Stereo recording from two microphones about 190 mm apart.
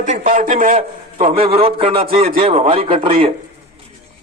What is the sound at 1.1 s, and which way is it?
A man's voice, 30° right (ahead or behind).